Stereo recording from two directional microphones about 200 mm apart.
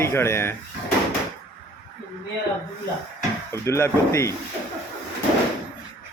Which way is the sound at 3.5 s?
15° left (ahead or behind).